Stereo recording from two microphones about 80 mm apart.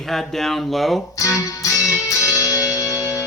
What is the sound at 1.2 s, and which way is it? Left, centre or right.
Speech, left.